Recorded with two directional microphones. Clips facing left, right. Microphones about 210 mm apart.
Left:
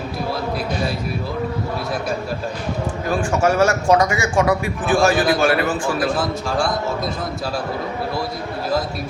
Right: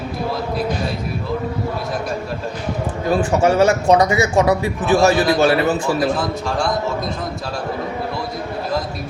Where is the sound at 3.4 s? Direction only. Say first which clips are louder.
Right 1 dB; 20° right (ahead or behind).